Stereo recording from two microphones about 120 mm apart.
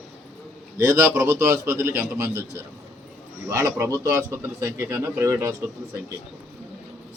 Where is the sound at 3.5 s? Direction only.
25° right (ahead or behind).